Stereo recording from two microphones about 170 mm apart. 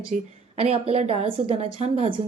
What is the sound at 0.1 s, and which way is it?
Speech, 50° right (ahead or behind).